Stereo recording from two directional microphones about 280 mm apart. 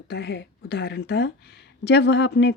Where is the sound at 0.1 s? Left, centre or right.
Left.